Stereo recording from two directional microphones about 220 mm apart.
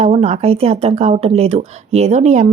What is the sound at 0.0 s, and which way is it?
Speech, 30° right (ahead or behind).